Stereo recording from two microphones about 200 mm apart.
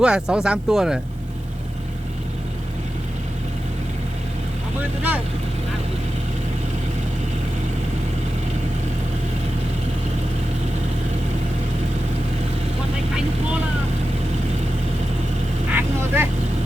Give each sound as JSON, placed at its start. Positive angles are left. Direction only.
{"t": 0.0, "sound": "speech", "side_deg": -5}
{"t": 15.7, "sound": "vehicle", "side_deg": -10}